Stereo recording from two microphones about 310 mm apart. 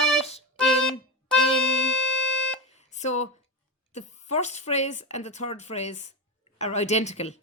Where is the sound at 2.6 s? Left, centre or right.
Left.